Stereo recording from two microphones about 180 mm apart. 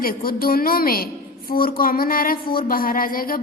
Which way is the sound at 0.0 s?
55° left (ahead or behind).